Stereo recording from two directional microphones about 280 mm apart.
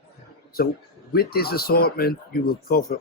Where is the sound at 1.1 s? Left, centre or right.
Left.